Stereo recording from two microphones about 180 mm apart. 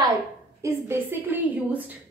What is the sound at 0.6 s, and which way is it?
A woman's voice, 15° right (ahead or behind).